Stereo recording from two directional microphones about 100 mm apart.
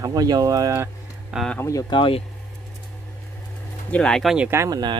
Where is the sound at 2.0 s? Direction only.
65° left (ahead or behind).